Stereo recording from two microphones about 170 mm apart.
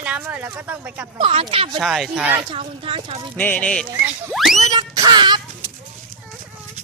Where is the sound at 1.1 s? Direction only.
35° right (ahead or behind).